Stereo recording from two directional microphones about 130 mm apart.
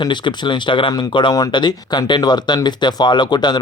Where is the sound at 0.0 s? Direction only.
35° left (ahead or behind).